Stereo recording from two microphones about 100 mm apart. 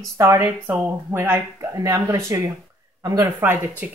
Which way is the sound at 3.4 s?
20° right (ahead or behind).